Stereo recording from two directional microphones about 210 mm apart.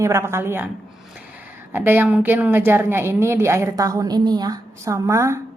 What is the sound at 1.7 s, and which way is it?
A woman's voice, 10° right (ahead or behind).